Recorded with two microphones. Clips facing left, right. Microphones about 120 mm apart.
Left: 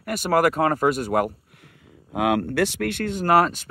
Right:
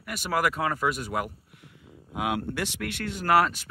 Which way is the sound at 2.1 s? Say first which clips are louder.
Left 8 dB; 65° left (ahead or behind).